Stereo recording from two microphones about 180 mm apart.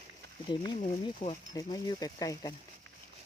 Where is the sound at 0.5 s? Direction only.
25° left (ahead or behind).